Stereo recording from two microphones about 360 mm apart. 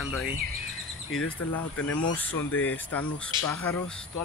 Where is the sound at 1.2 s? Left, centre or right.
Left.